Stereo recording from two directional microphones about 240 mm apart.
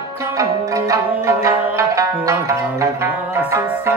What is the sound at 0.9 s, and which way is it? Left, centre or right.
Music, centre.